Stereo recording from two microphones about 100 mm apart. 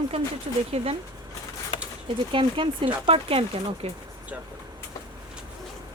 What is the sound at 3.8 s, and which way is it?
Speech, 90° right.